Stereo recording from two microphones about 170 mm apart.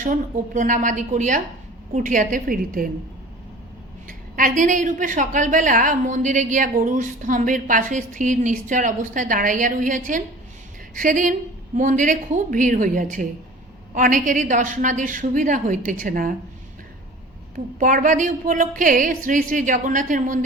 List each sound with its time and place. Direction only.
0.0 s a woman's voice: 50° right (ahead or behind)
4.0 s a woman's voice: 55° right (ahead or behind)
17.5 s a woman's voice: 50° right (ahead or behind)